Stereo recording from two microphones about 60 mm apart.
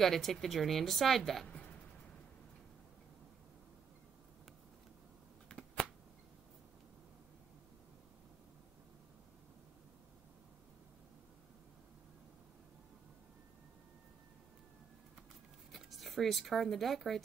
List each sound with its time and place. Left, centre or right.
0.0 s a woman's voice: centre
5.5 s finger snapping: centre
15.7 s speech: centre